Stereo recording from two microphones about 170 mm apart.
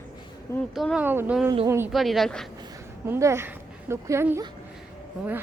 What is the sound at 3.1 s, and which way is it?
Speech, 15° right (ahead or behind).